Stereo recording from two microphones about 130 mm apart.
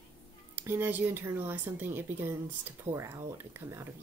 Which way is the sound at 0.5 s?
15° right (ahead or behind).